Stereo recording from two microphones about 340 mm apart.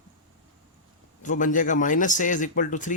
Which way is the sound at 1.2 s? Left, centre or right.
Left.